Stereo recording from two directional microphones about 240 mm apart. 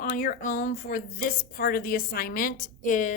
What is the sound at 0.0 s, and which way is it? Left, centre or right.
A woman's voice, left.